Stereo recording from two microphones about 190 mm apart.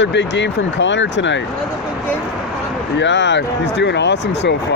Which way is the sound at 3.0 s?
70° left (ahead or behind).